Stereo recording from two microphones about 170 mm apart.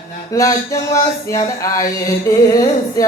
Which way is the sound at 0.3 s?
20° left (ahead or behind).